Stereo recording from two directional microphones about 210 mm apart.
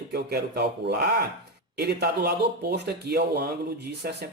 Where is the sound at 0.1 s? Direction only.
50° right (ahead or behind).